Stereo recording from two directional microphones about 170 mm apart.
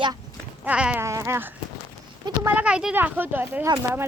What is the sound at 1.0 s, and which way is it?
A child's voice, 20° right (ahead or behind).